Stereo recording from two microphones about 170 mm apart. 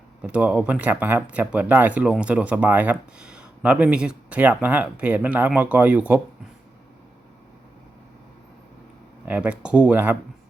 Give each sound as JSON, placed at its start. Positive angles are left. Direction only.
{"t": 0.2, "sound": "speech", "side_deg": -5}
{"t": 9.2, "sound": "speech", "side_deg": -10}